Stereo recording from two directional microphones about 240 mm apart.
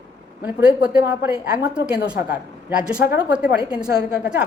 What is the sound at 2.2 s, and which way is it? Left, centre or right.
Speech, left.